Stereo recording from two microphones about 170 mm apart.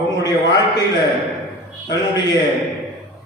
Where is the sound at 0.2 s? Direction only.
25° left (ahead or behind).